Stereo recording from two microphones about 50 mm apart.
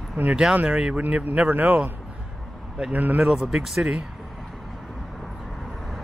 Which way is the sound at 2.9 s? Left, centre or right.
Right.